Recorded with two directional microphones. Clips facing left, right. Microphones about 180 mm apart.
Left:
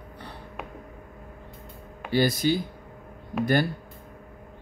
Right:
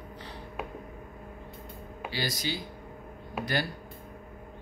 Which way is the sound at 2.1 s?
55° left (ahead or behind).